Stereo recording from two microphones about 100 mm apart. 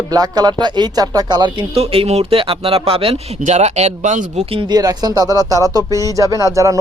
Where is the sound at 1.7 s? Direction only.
80° right.